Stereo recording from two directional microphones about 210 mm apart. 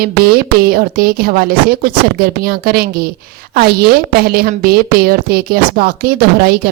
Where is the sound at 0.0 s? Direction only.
45° right (ahead or behind).